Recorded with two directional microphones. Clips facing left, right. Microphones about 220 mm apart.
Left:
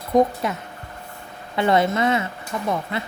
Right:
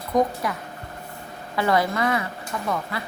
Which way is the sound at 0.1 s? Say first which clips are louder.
Left 4 dB; 25° left (ahead or behind).